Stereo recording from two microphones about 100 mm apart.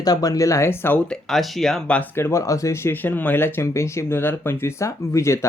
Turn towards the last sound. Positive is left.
turn(degrees=30)  # may be behind; listen again after turning